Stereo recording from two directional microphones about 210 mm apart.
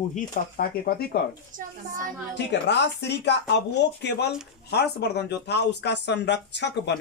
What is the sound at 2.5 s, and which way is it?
Speech, 55° left (ahead or behind).